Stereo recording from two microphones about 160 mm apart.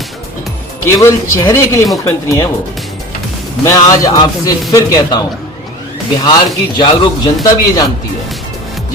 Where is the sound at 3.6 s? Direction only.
20° left (ahead or behind).